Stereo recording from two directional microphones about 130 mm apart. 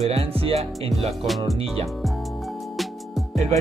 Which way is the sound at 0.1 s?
50° right (ahead or behind).